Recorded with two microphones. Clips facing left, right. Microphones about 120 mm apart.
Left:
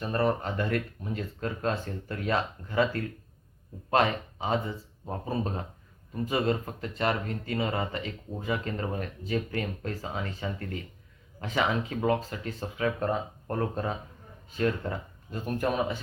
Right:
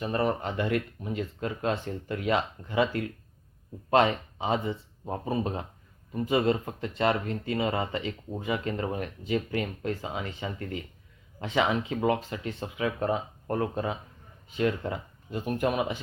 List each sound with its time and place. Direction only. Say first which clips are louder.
0.0 s speech: even; 15° right (ahead or behind)